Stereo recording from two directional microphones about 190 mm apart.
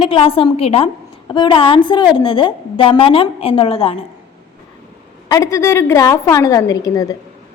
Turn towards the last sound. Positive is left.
turn(degrees=20)  # may be behind; listen again after turning